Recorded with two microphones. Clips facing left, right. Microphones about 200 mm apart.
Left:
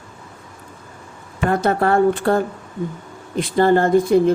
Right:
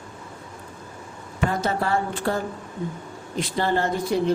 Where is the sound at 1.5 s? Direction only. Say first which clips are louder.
Left 7 dB; 55° left (ahead or behind).